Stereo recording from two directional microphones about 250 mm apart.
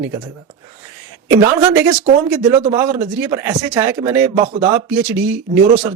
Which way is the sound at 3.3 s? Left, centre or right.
Centre.